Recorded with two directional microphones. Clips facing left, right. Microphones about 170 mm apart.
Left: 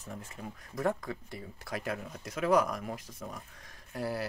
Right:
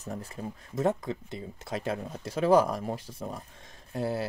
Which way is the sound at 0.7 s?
20° right (ahead or behind).